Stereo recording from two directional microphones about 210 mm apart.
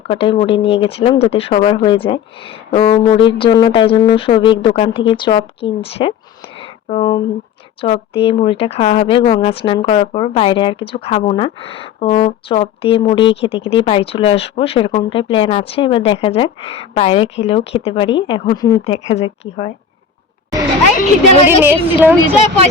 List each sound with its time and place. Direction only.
0.1 s speech: 25° left (ahead or behind)
19.0 s speech: 30° left (ahead or behind)
21.4 s a woman's voice: 10° right (ahead or behind)